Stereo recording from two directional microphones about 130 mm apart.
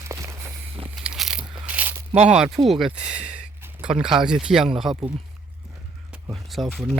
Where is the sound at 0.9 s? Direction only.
5° right (ahead or behind).